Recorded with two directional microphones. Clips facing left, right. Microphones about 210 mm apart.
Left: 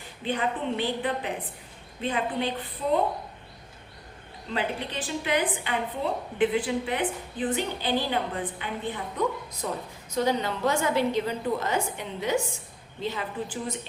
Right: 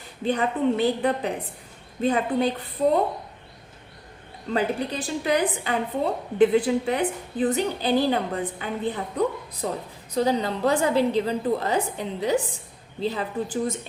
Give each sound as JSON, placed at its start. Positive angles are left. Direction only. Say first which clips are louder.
{"t": 0.3, "sound": "a woman's voice", "louder": "right 6 dB", "side_deg": -40}
{"t": 4.5, "sound": "a woman's voice", "louder": "right 5 dB", "side_deg": -40}